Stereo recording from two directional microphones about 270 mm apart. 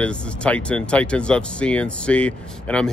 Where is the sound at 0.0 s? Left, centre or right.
Centre.